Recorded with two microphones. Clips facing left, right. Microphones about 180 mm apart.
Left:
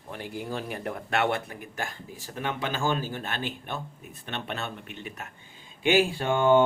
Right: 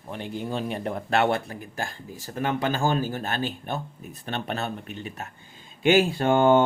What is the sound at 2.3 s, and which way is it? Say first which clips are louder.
Speech: right 5 dB; 45° right (ahead or behind).